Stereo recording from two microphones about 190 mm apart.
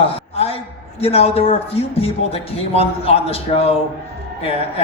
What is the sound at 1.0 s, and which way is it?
Speech, 30° left (ahead or behind).